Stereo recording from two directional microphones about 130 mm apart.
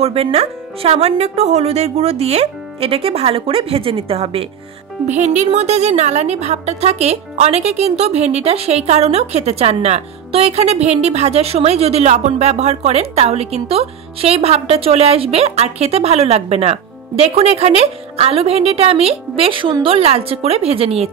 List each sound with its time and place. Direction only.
0.0 s a woman's voice: 50° right (ahead or behind)
5.0 s a woman's voice: 65° right (ahead or behind); by 21.1 s 50° right (ahead or behind)